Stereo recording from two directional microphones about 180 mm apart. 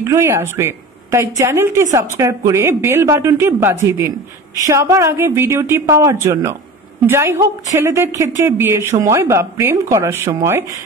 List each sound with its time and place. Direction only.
0.0 s a woman's voice: 15° right (ahead or behind)